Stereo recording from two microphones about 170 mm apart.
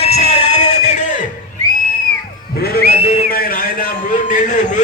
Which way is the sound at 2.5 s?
65° left (ahead or behind).